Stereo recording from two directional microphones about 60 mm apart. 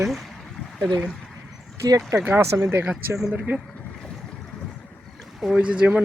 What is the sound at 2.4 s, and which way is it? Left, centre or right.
Speech, right.